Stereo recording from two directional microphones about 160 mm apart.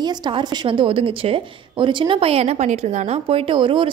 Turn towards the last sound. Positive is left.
turn(degrees=-30)  # may be behind; listen again after turning